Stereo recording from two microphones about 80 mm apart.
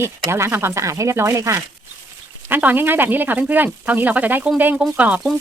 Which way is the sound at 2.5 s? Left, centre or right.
Right.